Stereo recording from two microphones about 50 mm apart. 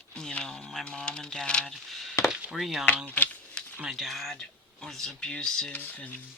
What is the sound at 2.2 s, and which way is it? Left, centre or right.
Chop, centre.